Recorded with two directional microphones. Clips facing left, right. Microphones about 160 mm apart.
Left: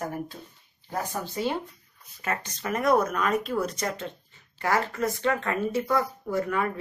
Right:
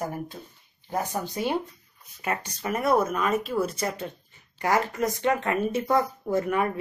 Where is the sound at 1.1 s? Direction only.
15° right (ahead or behind).